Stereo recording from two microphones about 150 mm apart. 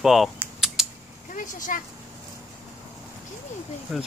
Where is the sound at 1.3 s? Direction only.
60° left (ahead or behind).